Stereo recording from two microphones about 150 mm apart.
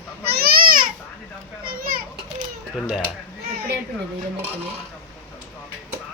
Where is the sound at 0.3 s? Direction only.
90° right; by 0.8 s 75° right (ahead or behind).